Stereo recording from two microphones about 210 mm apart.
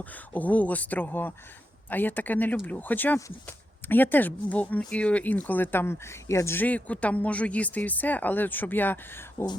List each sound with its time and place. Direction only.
0.3 s speech: 5° left (ahead or behind)